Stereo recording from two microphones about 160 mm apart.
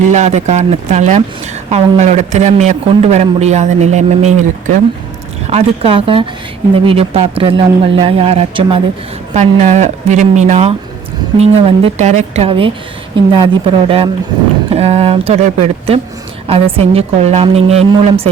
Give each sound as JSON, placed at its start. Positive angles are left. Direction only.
{"t": 0.1, "sound": "a man's voice", "side_deg": -45}
{"t": 5.5, "sound": "speech", "side_deg": -40}
{"t": 9.3, "sound": "a man's voice", "side_deg": -45}